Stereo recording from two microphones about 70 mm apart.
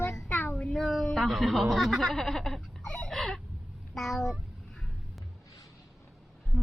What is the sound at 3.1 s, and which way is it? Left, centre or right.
Chicken, centre.